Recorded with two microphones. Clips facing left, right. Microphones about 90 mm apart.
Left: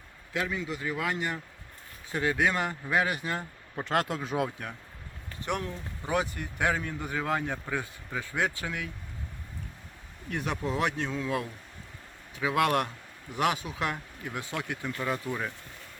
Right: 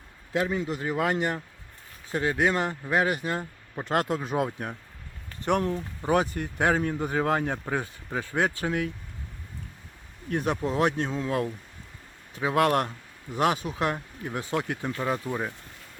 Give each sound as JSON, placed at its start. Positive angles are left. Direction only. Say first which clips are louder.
{"t": 0.3, "sound": "speech", "louder": "right 5 dB", "side_deg": -40}
{"t": 2.1, "sound": "speech", "louder": "right 2 dB", "side_deg": -25}
{"t": 3.8, "sound": "speech", "louder": "right 2 dB", "side_deg": -15}
{"t": 4.4, "sound": "speech", "louder": "right 3 dB", "side_deg": -35}
{"t": 10.2, "sound": "speech", "louder": "right 5 dB", "side_deg": -40}
{"t": 12.4, "sound": "speech", "louder": "right 3 dB", "side_deg": -35}